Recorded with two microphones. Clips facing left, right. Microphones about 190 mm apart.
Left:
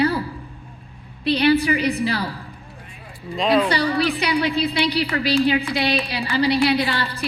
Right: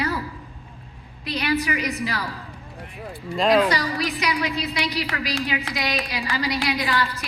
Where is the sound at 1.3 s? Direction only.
30° left (ahead or behind).